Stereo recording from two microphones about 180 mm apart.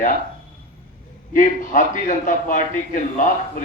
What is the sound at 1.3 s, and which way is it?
A man's voice, 45° left (ahead or behind).